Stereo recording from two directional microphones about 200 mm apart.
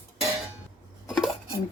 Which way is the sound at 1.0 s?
Centre (ahead or behind).